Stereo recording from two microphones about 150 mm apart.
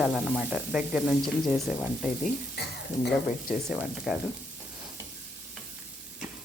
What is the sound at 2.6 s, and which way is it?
Speech, 85° left.